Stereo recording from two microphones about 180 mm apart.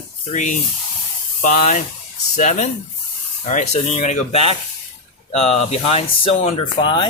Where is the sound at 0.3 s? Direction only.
45° left (ahead or behind).